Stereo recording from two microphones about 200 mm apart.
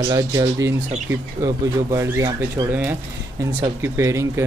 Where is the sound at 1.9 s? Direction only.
15° right (ahead or behind).